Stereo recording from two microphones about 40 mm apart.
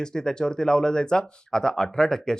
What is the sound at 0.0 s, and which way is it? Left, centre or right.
Speech, centre.